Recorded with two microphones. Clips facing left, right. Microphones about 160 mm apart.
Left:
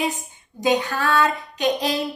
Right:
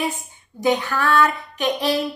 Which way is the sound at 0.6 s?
15° left (ahead or behind).